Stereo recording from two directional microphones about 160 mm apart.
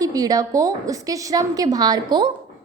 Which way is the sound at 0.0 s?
20° right (ahead or behind).